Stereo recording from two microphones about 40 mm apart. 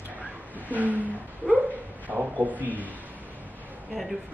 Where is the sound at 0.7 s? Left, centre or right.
Right.